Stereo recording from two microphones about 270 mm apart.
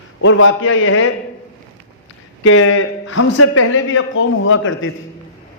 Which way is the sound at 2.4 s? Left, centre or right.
Left.